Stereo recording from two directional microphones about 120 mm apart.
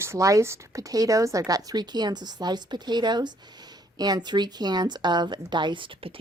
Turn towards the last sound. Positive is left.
turn(degrees=-40)  # may be behind; listen again after turning